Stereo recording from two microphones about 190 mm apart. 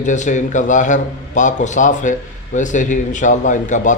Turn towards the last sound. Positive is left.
turn(degrees=40)  # may be behind; listen again after turning